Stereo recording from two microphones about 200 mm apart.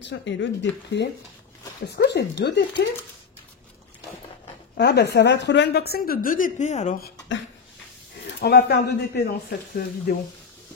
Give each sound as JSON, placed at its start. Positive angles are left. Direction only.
{"t": 0.0, "sound": "speech", "side_deg": 60}
{"t": 4.7, "sound": "a woman's voice", "side_deg": 55}
{"t": 8.4, "sound": "a woman's voice", "side_deg": 55}